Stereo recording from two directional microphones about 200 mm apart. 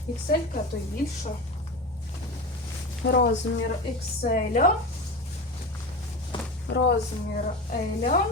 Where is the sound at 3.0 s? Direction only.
55° left (ahead or behind).